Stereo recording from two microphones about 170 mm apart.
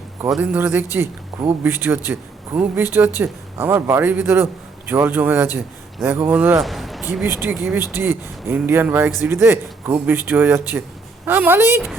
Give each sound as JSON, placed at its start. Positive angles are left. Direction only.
{"t": 0.3, "sound": "speech", "side_deg": -5}
{"t": 6.6, "sound": "speech", "side_deg": 0}